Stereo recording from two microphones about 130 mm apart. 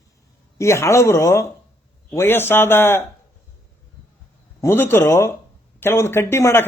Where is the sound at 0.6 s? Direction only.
20° left (ahead or behind).